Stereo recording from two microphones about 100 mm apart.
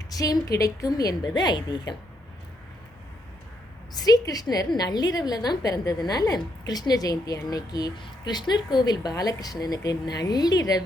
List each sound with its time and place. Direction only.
0.1 s a woman's voice: 35° left (ahead or behind)
3.9 s a woman's voice: 40° left (ahead or behind)